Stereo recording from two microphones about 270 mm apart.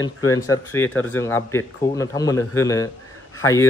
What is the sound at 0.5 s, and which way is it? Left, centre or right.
Speech, centre.